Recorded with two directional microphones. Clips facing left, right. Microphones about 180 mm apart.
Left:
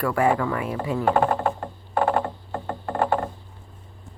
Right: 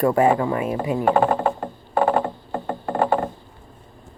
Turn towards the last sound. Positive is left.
turn(degrees=-5)  # may be behind; listen again after turning